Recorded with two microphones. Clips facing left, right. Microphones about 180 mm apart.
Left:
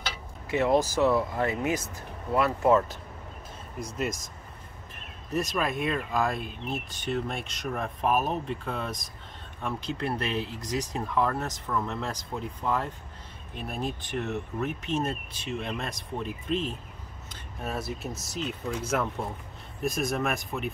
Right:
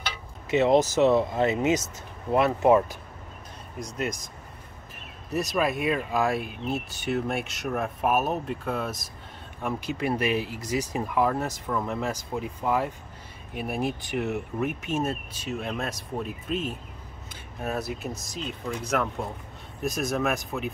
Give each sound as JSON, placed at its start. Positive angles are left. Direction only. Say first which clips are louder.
{"t": 0.5, "sound": "speech", "louder": "right 3 dB", "side_deg": -20}
{"t": 4.0, "sound": "speech", "louder": "right 1 dB", "side_deg": 0}
{"t": 5.3, "sound": "speech", "louder": "right 3 dB", "side_deg": -5}
{"t": 19.8, "sound": "speech", "louder": "right 1 dB", "side_deg": 0}